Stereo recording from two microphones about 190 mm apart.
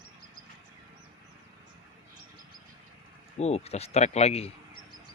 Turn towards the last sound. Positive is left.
turn(degrees=35)  # may be behind; listen again after turning